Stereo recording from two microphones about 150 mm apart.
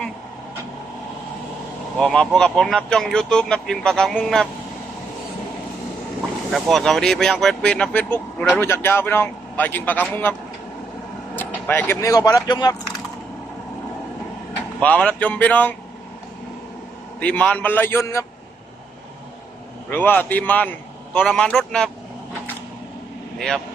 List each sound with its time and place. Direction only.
2.0 s speech: 5° left (ahead or behind)
6.5 s speech: centre (ahead or behind)
11.3 s speech: 15° left (ahead or behind)
14.8 s speech: 10° left (ahead or behind)
17.2 s speech: 10° left (ahead or behind)
19.9 s speech: 10° left (ahead or behind)